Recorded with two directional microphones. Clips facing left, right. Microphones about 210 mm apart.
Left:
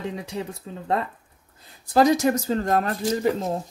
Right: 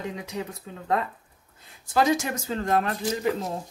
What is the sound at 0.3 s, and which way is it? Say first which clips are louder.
Speech: left 2 dB; 30° left (ahead or behind).